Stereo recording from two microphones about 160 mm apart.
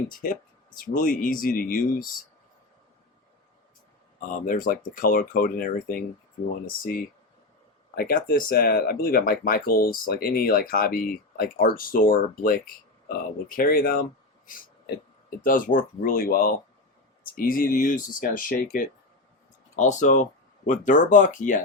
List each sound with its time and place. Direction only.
0.1 s speech: 60° left (ahead or behind)
4.2 s speech: 60° left (ahead or behind)
19.7 s speech: 50° left (ahead or behind)